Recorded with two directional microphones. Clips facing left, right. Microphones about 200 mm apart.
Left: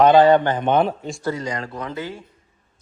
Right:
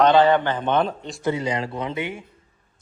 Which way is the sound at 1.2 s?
25° right (ahead or behind).